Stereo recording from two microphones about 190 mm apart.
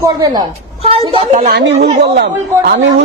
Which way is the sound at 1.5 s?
60° right (ahead or behind).